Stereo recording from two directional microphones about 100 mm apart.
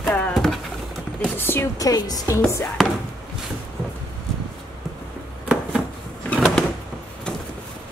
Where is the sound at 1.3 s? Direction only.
20° left (ahead or behind).